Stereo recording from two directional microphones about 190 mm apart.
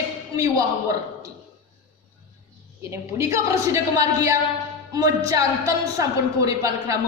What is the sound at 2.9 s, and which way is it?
A woman's voice, 15° right (ahead or behind).